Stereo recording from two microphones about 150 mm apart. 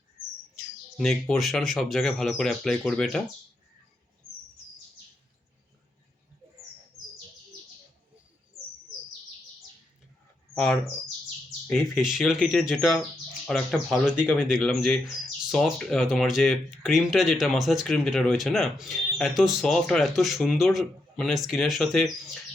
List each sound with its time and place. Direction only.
0.9 s speech: centre (ahead or behind)
10.5 s speech: 5° left (ahead or behind)
14.3 s speech: centre (ahead or behind)